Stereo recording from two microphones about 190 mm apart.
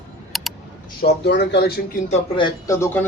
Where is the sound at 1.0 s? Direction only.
60° left (ahead or behind).